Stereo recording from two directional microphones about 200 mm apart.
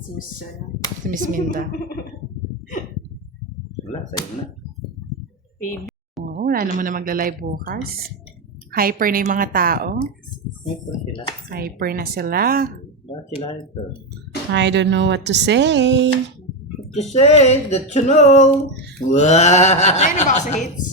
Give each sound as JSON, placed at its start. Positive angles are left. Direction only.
{"t": 1.0, "sound": "speech", "side_deg": -40}
{"t": 6.4, "sound": "speech", "side_deg": -45}
{"t": 11.4, "sound": "speech", "side_deg": -50}
{"t": 13.1, "sound": "speech", "side_deg": 25}
{"t": 14.5, "sound": "speech", "side_deg": -60}
{"t": 16.9, "sound": "speech", "side_deg": 35}